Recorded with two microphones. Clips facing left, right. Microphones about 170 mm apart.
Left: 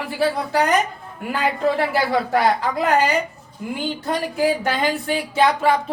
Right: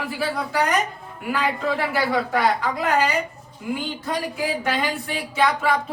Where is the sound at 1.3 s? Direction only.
30° left (ahead or behind).